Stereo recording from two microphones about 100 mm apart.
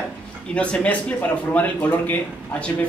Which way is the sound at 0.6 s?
10° left (ahead or behind).